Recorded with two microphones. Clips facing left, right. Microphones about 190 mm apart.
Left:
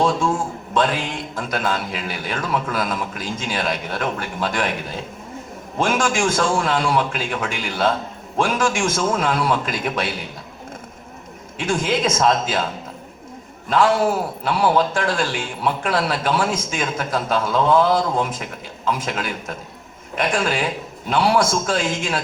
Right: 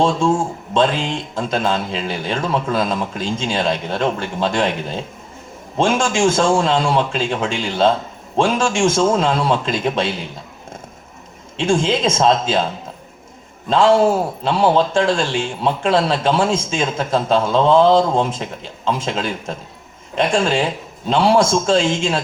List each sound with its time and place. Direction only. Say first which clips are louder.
0.0 s a man's voice: right 3 dB; 25° right (ahead or behind)
11.5 s a man's voice: right 4 dB; 25° right (ahead or behind)
13.7 s a man's voice: right 4 dB; 25° right (ahead or behind)